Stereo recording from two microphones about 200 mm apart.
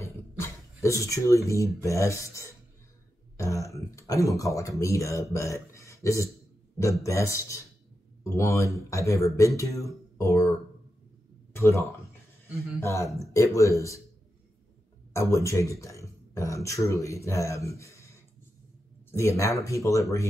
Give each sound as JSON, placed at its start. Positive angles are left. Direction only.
{"t": 0.0, "sound": "a sound", "side_deg": 15}
{"t": 1.8, "sound": "speech", "side_deg": 15}
{"t": 3.3, "sound": "throat clearing", "side_deg": 15}
{"t": 4.4, "sound": "speech", "side_deg": 15}
{"t": 11.5, "sound": "a sound", "side_deg": 15}
{"t": 12.8, "sound": "speech", "side_deg": 15}
{"t": 15.1, "sound": "speech", "side_deg": 15}